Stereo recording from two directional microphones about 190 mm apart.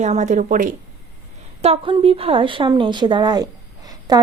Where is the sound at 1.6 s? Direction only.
30° right (ahead or behind).